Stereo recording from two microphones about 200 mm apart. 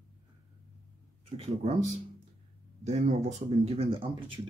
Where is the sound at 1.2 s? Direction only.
30° right (ahead or behind).